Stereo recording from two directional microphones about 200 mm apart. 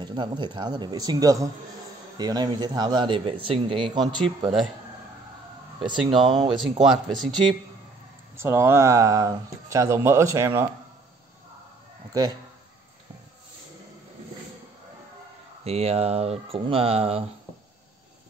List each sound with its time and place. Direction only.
0.0 s speech: 20° right (ahead or behind)
5.8 s speech: 25° right (ahead or behind)
8.4 s speech: 15° right (ahead or behind)
12.1 s speech: 20° right (ahead or behind)
15.6 s speech: 30° right (ahead or behind)